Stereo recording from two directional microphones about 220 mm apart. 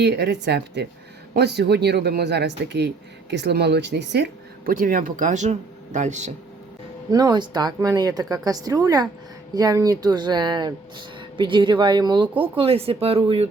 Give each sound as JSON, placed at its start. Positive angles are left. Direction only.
{"t": 0.0, "sound": "speech", "side_deg": -50}
{"t": 7.1, "sound": "speech", "side_deg": -20}